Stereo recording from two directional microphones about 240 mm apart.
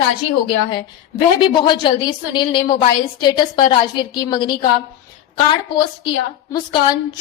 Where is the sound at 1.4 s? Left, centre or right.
Centre.